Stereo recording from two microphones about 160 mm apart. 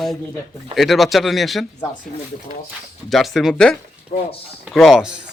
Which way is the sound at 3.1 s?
Centre (ahead or behind).